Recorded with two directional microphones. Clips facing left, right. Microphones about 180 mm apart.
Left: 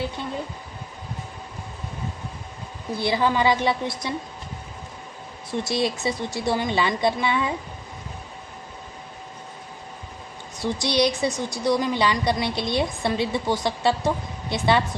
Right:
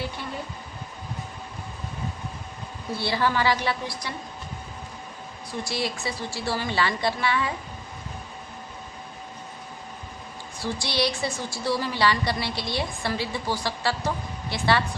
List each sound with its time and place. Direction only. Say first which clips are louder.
3.0 s a woman's voice: left 3 dB; 15° left (ahead or behind)
5.5 s a woman's voice: left 5 dB; 20° left (ahead or behind)
10.6 s a woman's voice: left 5 dB; 20° left (ahead or behind)